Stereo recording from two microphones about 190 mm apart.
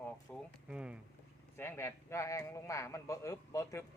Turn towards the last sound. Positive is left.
turn(degrees=15)  # may be behind; listen again after turning